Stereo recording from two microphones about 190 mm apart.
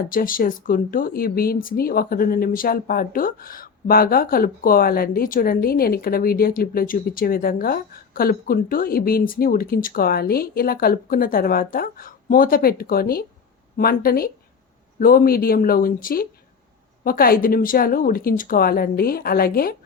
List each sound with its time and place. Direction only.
0.1 s speech: 50° left (ahead or behind)